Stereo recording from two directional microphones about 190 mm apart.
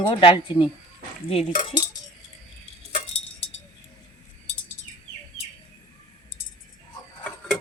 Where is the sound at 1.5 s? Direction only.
45° left (ahead or behind).